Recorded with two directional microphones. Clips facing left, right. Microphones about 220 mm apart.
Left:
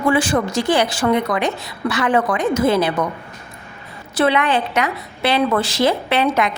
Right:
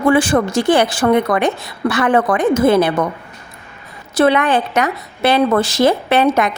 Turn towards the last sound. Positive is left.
turn(degrees=-45)  # may be behind; listen again after turning